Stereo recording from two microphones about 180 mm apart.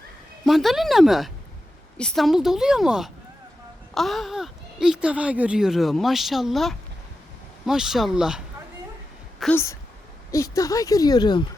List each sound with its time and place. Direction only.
0.4 s speech: centre (ahead or behind)
9.4 s a woman's voice: 10° left (ahead or behind)